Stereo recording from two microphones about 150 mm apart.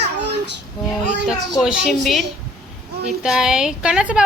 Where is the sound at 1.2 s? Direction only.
5° right (ahead or behind).